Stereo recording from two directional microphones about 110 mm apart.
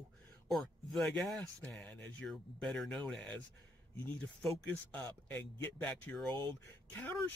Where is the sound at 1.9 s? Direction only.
15° left (ahead or behind).